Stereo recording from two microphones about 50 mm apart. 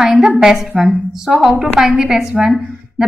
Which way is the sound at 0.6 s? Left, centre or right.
Centre.